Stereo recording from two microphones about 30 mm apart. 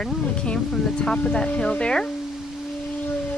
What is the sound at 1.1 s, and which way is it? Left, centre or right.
Speech, left.